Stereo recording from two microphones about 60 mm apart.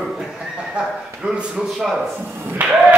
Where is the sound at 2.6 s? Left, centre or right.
Right.